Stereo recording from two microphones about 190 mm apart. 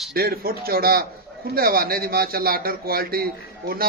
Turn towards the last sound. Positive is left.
turn(degrees=-55)  # may be behind; listen again after turning